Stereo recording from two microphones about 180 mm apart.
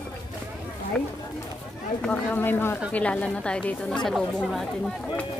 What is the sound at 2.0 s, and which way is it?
A woman's voice, 10° left (ahead or behind).